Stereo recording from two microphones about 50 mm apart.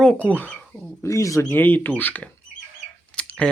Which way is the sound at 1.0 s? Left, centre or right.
Left.